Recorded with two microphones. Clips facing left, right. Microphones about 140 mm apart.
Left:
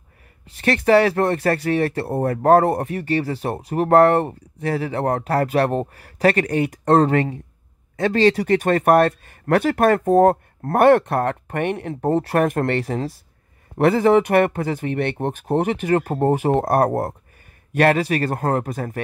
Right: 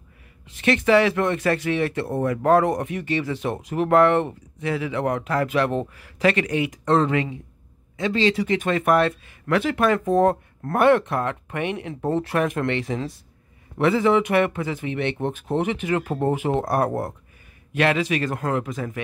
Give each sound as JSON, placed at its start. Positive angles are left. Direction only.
{"t": 0.6, "sound": "speech", "side_deg": 45}
{"t": 11.9, "sound": "speech", "side_deg": 40}